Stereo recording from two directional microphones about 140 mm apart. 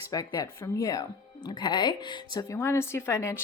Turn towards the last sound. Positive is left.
turn(degrees=20)  # may be behind; listen again after turning